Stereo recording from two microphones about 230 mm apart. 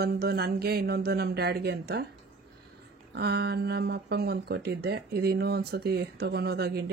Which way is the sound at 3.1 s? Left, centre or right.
Right.